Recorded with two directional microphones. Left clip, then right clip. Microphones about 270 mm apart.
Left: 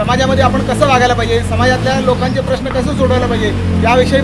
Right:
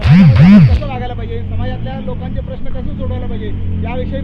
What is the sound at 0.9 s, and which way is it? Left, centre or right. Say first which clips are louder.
Speech: left 14 dB; centre.